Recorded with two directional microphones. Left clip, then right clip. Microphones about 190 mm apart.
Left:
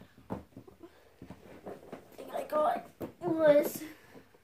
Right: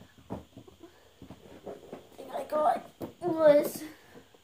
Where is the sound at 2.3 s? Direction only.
5° left (ahead or behind).